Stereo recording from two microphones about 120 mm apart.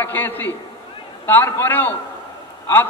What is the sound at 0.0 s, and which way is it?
A man's voice, 15° left (ahead or behind).